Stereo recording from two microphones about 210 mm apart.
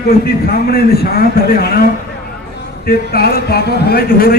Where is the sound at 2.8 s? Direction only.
45° left (ahead or behind).